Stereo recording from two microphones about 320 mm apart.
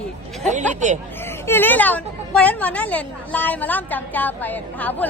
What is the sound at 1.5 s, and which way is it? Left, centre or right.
A woman's voice, centre.